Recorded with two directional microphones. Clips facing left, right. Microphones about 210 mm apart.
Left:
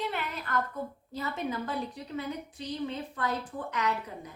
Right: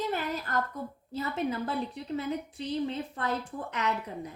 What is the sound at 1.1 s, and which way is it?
Speech, 30° right (ahead or behind).